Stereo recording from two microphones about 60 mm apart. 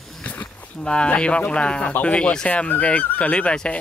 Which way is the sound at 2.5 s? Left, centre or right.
Left.